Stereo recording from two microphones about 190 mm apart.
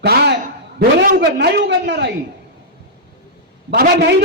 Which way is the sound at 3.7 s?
60° right (ahead or behind).